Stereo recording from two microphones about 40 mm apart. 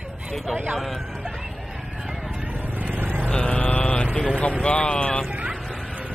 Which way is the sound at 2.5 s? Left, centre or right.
Right.